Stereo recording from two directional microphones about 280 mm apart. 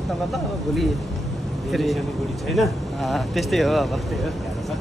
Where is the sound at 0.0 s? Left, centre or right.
Centre.